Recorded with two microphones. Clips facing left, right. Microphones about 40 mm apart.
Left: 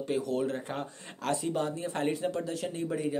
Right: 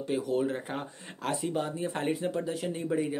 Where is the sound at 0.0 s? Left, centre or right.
Centre.